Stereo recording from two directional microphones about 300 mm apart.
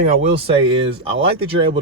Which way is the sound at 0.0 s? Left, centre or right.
Right.